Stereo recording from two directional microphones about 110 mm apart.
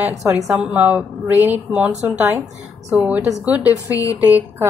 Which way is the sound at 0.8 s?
15° right (ahead or behind).